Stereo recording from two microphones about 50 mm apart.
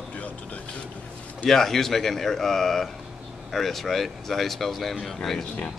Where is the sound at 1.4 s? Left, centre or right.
Centre.